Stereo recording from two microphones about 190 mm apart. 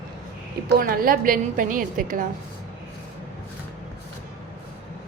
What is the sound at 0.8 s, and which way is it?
A woman's voice, 50° right (ahead or behind).